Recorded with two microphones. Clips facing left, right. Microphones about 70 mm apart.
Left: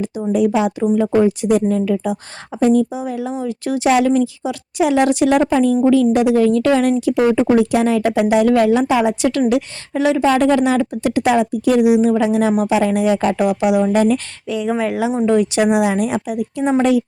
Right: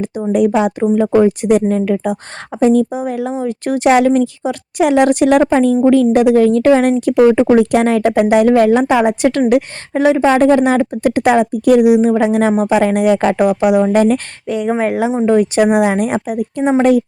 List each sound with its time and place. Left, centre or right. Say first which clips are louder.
0.3 s speech: right 3 dB; right
1.0 s a woman's voice: right 4 dB; right
1.4 s a woman's voice: right 3 dB; right
12.8 s a woman's voice: right 3 dB; right